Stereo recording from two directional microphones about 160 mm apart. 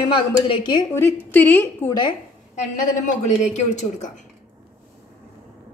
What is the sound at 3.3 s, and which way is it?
Dishes, 45° left (ahead or behind).